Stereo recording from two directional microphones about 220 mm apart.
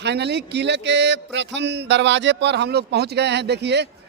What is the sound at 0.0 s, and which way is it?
Speech, 50° right (ahead or behind).